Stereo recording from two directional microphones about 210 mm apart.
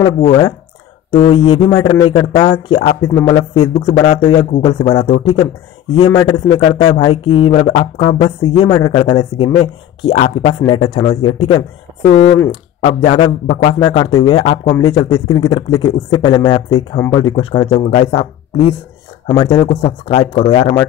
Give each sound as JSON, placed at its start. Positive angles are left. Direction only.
{"t": 0.0, "sound": "speech", "side_deg": 25}